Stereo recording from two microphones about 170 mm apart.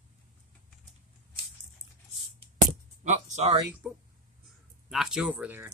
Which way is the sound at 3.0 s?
40° right (ahead or behind).